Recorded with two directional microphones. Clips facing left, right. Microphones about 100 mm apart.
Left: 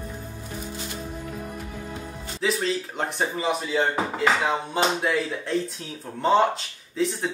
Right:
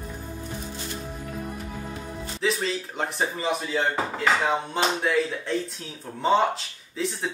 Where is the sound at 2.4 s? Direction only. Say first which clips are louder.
Left 2 dB; centre (ahead or behind).